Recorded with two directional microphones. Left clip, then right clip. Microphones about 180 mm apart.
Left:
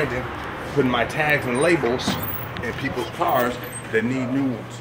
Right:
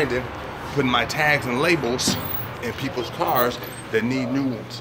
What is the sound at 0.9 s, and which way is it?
Speech, 20° right (ahead or behind).